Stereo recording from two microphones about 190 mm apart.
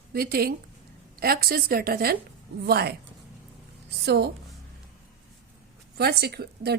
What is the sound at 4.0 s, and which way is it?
Speech, 60° right (ahead or behind).